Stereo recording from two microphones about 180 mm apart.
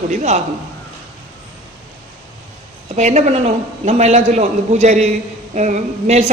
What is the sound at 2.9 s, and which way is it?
A woman's voice, 40° right (ahead or behind).